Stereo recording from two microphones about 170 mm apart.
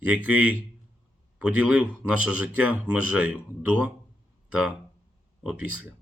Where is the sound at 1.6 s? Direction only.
10° right (ahead or behind).